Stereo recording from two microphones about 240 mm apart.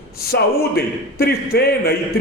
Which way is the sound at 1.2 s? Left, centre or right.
Left.